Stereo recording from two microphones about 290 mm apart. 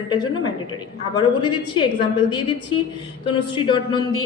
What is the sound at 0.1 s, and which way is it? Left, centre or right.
A woman's voice, centre.